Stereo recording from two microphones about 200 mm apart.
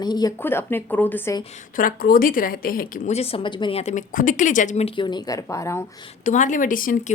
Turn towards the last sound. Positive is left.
turn(degrees=40)  # may be behind; listen again after turning